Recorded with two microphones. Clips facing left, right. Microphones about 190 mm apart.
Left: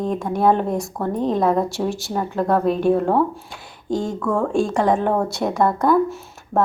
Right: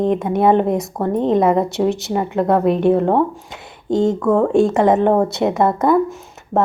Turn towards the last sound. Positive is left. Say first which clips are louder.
# right 3 dB
turn(degrees=-20)  # may be behind; listen again after turning